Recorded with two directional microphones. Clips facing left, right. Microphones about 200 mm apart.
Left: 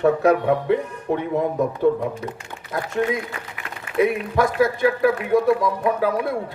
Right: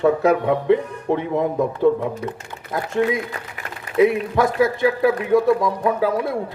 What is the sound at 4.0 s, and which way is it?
A man's voice, 25° right (ahead or behind).